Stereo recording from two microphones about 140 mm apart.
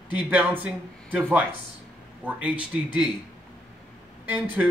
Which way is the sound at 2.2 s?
10° right (ahead or behind).